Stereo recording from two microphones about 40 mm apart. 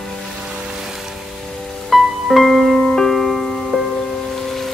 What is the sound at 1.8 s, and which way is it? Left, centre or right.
Music, centre.